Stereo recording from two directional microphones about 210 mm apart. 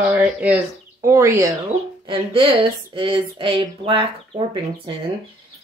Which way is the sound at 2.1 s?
25° right (ahead or behind).